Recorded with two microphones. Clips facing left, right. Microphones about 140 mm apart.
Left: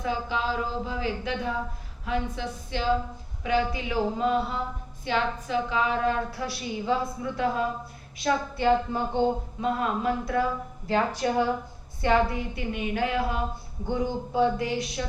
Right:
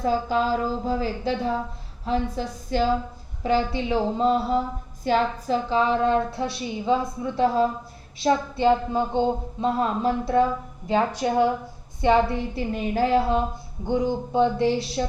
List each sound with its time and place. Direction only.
0.0 s a woman's voice: 40° right (ahead or behind)
10.8 s a woman's voice: 15° right (ahead or behind)
13.8 s a woman's voice: 20° right (ahead or behind)